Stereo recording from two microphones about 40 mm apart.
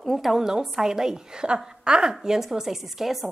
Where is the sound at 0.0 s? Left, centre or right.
Centre.